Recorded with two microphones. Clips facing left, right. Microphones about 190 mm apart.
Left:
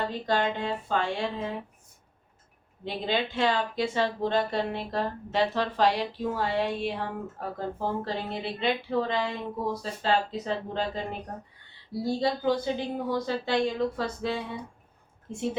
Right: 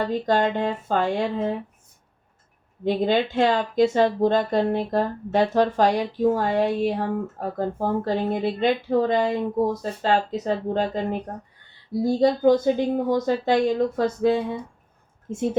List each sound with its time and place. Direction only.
0.3 s speech: 50° right (ahead or behind)
2.8 s speech: 50° right (ahead or behind)
12.0 s speech: 45° right (ahead or behind)